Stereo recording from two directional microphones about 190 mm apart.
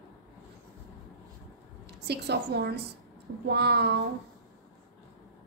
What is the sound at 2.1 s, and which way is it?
Speech, 60° right (ahead or behind).